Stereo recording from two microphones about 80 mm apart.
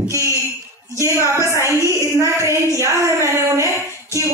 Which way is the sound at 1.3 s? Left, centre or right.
Right.